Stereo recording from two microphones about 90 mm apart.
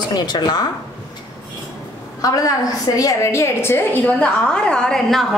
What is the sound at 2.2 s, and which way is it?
A woman's voice, 40° left (ahead or behind).